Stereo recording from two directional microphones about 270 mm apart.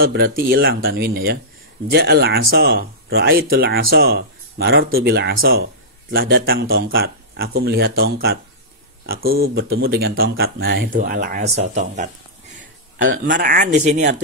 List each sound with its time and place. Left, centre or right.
0.0 s speech: right
13.1 s speech: right
13.5 s speech: right